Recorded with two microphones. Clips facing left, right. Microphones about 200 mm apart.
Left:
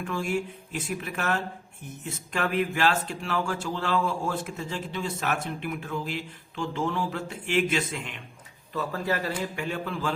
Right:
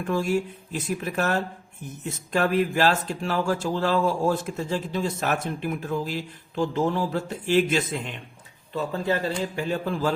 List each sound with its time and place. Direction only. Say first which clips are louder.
0.1 s speech: right 6 dB; 40° right (ahead or behind)